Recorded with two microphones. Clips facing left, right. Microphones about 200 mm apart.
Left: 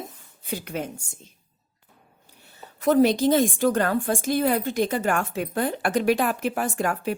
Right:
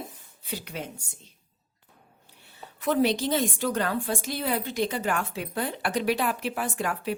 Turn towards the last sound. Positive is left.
turn(degrees=45)  # may be behind; listen again after turning